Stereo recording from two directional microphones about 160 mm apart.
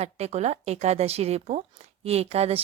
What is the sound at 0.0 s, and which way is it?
A woman's voice, 40° right (ahead or behind).